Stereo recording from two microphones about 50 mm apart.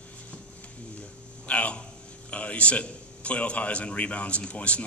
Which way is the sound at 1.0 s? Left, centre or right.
Left.